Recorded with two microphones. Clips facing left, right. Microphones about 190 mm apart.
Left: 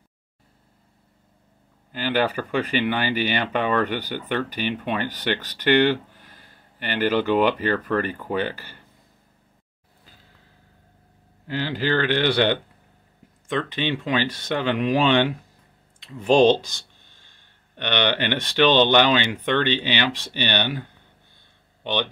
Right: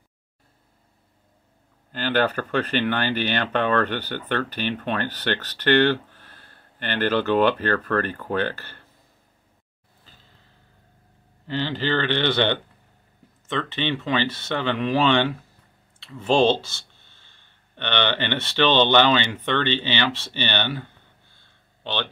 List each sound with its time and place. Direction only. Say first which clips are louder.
1.9 s speech: even; 10° left (ahead or behind)
11.4 s speech: even; 10° left (ahead or behind)
21.4 s a sound: left 2 dB; 15° left (ahead or behind)